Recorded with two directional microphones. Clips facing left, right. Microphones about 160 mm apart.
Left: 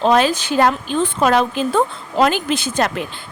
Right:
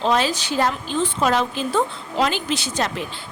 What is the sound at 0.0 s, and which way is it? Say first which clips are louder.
A woman's voice: left 5 dB; 55° left (ahead or behind).